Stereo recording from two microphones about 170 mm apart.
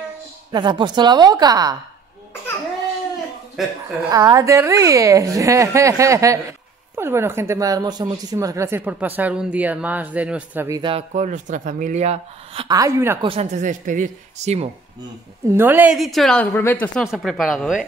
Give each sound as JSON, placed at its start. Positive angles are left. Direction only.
{"t": 0.5, "sound": "a woman's voice", "side_deg": -25}
{"t": 3.6, "sound": "a woman's voice", "side_deg": 0}
{"t": 4.1, "sound": "a woman's voice", "side_deg": -20}
{"t": 10.8, "sound": "speech", "side_deg": -35}
{"t": 12.6, "sound": "a woman's voice", "side_deg": -20}
{"t": 13.2, "sound": "speech", "side_deg": -30}
{"t": 13.6, "sound": "speech", "side_deg": -50}
{"t": 15.5, "sound": "a woman's voice", "side_deg": -10}